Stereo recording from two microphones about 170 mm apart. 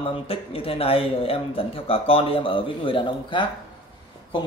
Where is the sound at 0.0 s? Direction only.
35° left (ahead or behind).